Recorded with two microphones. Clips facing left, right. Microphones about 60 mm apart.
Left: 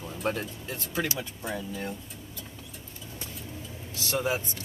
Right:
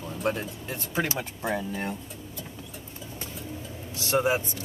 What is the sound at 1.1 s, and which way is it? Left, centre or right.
Speech, right.